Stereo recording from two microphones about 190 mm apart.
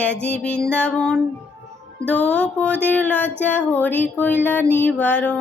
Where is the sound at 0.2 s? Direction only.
5° left (ahead or behind).